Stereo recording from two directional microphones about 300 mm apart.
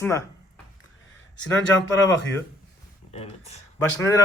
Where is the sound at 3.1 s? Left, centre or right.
Left.